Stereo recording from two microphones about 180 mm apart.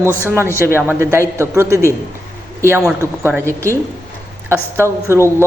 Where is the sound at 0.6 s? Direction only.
15° right (ahead or behind).